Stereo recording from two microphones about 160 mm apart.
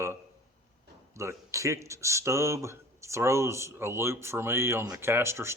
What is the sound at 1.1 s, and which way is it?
A man's voice, 20° right (ahead or behind).